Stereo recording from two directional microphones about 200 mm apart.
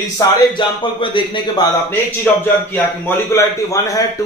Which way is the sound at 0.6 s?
25° left (ahead or behind).